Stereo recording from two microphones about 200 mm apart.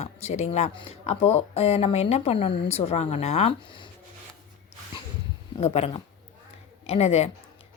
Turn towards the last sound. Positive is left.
turn(degrees=30)  # may be behind; listen again after turning